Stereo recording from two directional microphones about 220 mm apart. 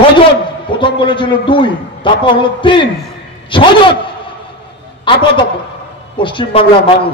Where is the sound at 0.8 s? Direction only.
20° left (ahead or behind).